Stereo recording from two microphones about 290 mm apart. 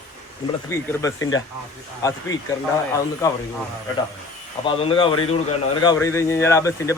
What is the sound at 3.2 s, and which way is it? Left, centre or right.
Speech, centre.